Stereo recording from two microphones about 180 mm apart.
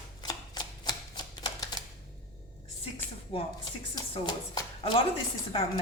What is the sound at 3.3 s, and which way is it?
A woman's voice, 30° left (ahead or behind).